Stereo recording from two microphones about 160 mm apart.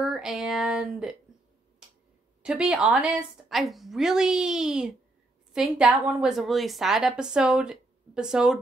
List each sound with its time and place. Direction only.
0.0 s speech: 5° right (ahead or behind)
2.4 s a woman's voice: 5° right (ahead or behind)